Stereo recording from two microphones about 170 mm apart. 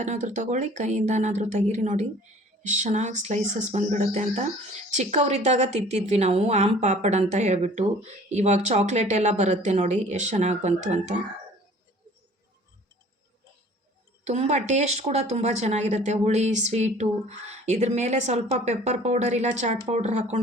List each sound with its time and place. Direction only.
0.0 s a woman's voice: 45° right (ahead or behind)
14.3 s a woman's voice: 40° right (ahead or behind)